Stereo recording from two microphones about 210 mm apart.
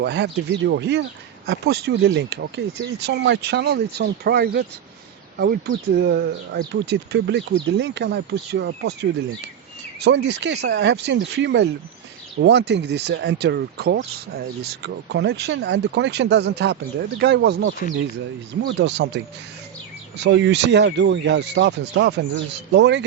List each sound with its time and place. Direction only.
0.0 s speech: 55° right (ahead or behind)